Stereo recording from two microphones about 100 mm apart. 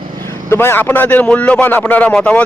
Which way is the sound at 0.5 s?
25° left (ahead or behind).